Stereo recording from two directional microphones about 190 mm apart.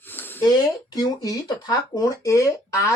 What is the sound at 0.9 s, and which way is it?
Speech, 20° left (ahead or behind).